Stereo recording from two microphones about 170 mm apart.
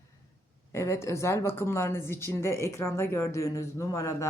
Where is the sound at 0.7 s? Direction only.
15° left (ahead or behind).